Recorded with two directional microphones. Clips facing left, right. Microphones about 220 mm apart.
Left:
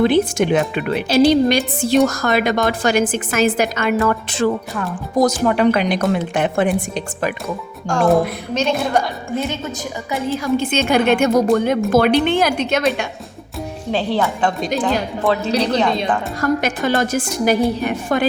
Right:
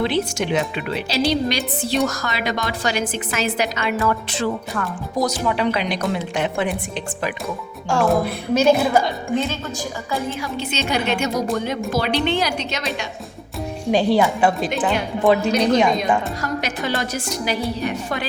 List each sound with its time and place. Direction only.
0.0 s a woman's voice: 50° left (ahead or behind)
5.2 s a woman's voice: 50° left (ahead or behind)
7.4 s a woman's voice: 5° right (ahead or behind)
10.3 s a woman's voice: 45° left (ahead or behind)
13.9 s a woman's voice: 15° right (ahead or behind)
16.4 s a woman's voice: 50° left (ahead or behind)